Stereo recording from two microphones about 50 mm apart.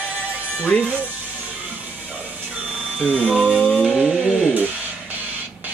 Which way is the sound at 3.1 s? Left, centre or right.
Right.